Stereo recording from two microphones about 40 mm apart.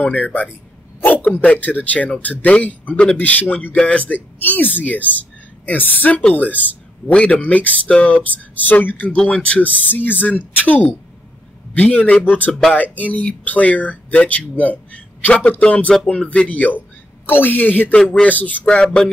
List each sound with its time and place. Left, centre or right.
0.0 s speech: left
3.8 s speech: left
4.1 s speech: left
7.1 s speech: left
9.1 s speech: left
9.6 s speech: left
14.9 s a sound: left
15.6 s speech: left
17.3 s speech: left
19.0 s speech: left